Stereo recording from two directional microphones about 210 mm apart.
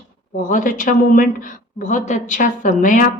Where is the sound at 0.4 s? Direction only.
40° left (ahead or behind).